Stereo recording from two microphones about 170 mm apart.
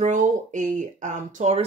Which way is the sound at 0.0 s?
45° right (ahead or behind).